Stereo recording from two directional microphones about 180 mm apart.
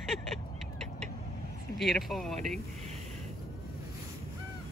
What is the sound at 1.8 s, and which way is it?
Speech, centre (ahead or behind).